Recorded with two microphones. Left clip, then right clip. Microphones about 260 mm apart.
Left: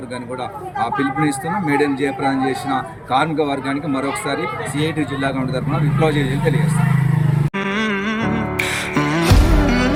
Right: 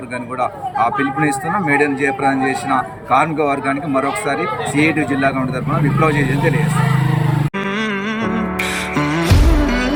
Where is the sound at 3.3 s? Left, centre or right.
Centre.